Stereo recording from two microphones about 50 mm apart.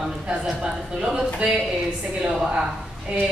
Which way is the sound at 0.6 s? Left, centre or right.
Centre.